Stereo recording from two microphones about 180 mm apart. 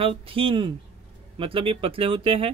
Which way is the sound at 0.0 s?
30° right (ahead or behind).